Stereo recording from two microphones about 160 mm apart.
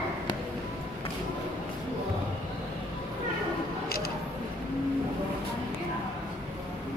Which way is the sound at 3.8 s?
75° left (ahead or behind).